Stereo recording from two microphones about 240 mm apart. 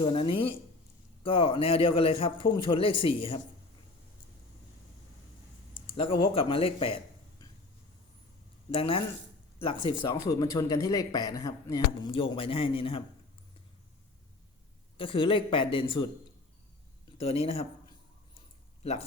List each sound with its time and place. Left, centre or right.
0.0 s a man's voice: left
5.9 s speech: left
8.7 s a man's voice: left
14.9 s a man's voice: left
17.2 s speech: left